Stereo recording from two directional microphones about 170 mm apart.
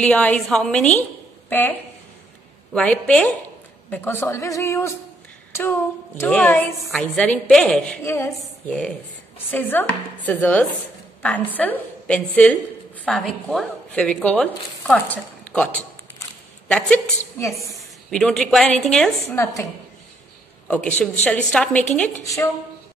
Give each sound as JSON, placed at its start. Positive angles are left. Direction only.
{"t": 0.0, "sound": "a woman's voice", "side_deg": 5}
{"t": 6.1, "sound": "a woman's voice", "side_deg": 10}
{"t": 17.4, "sound": "a woman's voice", "side_deg": 20}
{"t": 18.1, "sound": "a woman's voice", "side_deg": 5}
{"t": 19.3, "sound": "a woman's voice", "side_deg": 15}
{"t": 20.6, "sound": "a woman's voice", "side_deg": 5}